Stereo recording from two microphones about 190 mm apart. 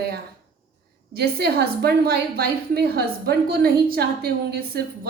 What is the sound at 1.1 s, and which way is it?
A woman's voice, 55° right (ahead or behind).